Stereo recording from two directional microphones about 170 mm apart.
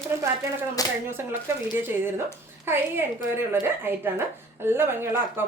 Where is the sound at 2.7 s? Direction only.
15° right (ahead or behind).